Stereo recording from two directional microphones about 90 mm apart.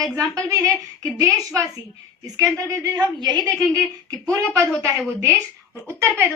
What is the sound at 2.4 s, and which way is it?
Speech, 45° right (ahead or behind).